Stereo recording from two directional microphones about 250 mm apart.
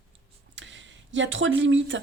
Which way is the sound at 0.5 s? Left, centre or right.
Right.